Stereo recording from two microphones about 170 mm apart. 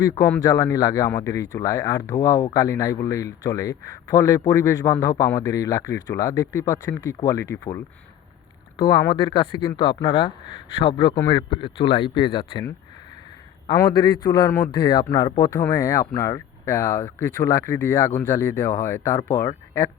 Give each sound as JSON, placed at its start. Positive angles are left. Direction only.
{"t": 0.0, "sound": "speech", "side_deg": 20}
{"t": 8.8, "sound": "speech", "side_deg": 25}
{"t": 13.9, "sound": "speech", "side_deg": 25}